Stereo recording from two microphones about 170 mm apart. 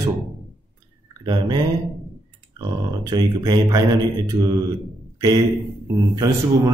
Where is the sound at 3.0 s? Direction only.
25° right (ahead or behind).